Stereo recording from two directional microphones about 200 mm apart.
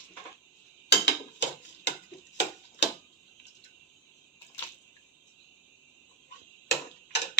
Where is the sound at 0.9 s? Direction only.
60° left (ahead or behind).